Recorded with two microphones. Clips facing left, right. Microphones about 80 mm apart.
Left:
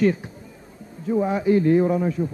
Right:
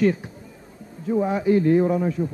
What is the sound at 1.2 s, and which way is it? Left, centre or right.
Speech, centre.